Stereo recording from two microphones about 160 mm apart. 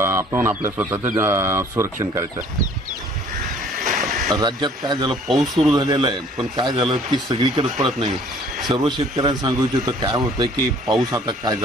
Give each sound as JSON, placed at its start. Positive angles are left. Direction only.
{"t": 0.0, "sound": "speech", "side_deg": -15}
{"t": 4.3, "sound": "speech", "side_deg": -25}
{"t": 5.1, "sound": "speech", "side_deg": 0}
{"t": 5.8, "sound": "speech", "side_deg": -30}
{"t": 8.6, "sound": "speech", "side_deg": -25}